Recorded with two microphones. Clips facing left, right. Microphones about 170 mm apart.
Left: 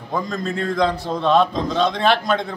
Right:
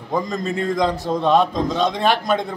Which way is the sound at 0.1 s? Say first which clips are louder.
Right 2 dB; 15° right (ahead or behind).